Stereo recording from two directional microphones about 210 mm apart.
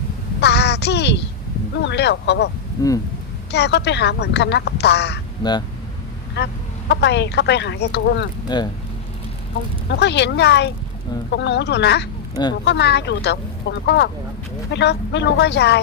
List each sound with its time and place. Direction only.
0.3 s a sound: 55° left (ahead or behind)
1.7 s speech: 55° left (ahead or behind)
2.8 s speech: 15° left (ahead or behind)
3.5 s speech: 55° left (ahead or behind)
5.4 s speech: 20° left (ahead or behind)
6.3 s speech: 55° left (ahead or behind)
8.4 s speech: 20° left (ahead or behind)
9.9 s speech: 55° left (ahead or behind)